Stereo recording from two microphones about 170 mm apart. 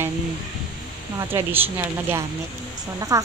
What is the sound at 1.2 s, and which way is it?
Speech, 15° right (ahead or behind).